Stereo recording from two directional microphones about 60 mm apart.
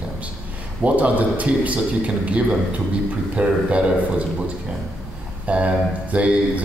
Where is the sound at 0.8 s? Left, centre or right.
Right.